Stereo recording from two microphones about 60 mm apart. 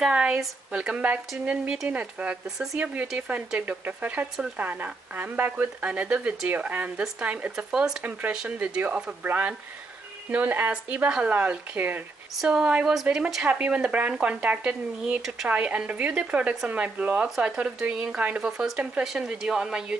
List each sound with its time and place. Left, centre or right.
0.0 s speech: centre
7.5 s speech: centre; by 12.0 s right
12.4 s speech: centre